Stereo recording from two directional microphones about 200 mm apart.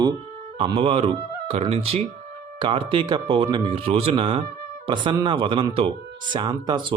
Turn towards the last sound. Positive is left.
turn(degrees=-20)  # may be behind; listen again after turning